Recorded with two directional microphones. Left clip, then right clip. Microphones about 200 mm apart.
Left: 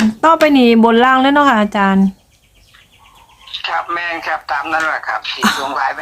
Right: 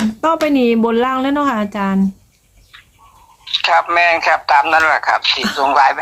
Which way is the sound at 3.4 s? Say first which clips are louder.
Right 6 dB; 55° right (ahead or behind).